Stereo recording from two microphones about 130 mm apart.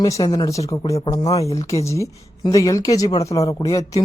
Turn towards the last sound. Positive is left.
turn(degrees=25)  # may be behind; listen again after turning